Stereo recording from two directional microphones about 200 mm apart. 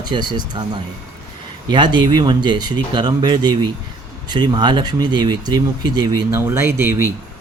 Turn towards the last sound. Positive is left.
turn(degrees=-10)  # may be behind; listen again after turning